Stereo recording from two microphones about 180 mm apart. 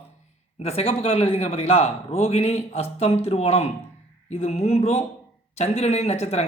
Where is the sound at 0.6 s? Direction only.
35° left (ahead or behind).